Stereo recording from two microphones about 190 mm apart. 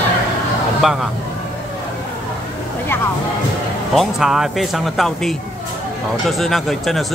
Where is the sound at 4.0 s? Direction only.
Centre (ahead or behind).